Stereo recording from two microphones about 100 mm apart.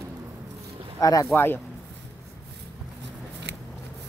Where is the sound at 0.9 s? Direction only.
35° left (ahead or behind).